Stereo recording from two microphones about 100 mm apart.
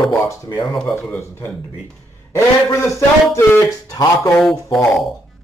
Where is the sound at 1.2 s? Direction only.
25° left (ahead or behind).